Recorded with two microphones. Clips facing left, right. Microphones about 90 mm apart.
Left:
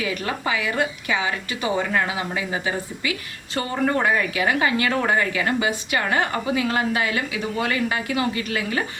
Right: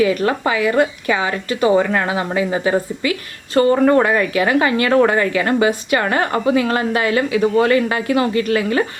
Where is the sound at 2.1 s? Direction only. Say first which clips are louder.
Right 7 dB; 45° right (ahead or behind); by 5.1 s 65° right (ahead or behind).